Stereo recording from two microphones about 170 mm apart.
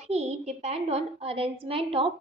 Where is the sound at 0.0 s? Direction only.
40° right (ahead or behind).